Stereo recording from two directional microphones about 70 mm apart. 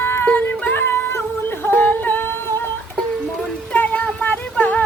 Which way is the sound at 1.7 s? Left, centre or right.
Left.